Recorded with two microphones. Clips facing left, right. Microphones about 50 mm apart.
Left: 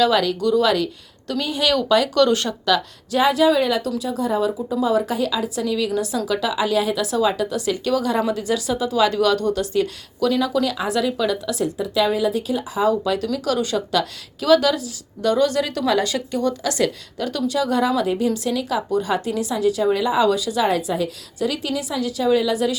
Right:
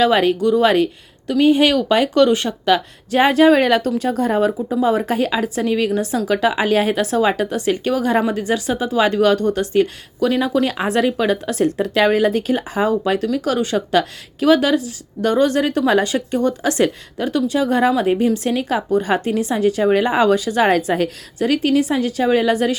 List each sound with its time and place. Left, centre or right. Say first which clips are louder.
0.0 s speech: right 3 dB; right
3.2 s a woman's voice: right 4 dB; right
13.2 s speech: right 3 dB; right